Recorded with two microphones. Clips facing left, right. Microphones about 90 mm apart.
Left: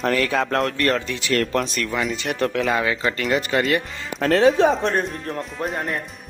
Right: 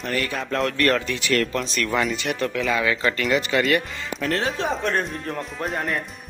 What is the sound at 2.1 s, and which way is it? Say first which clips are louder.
Speech: left 2 dB; 40° left (ahead or behind).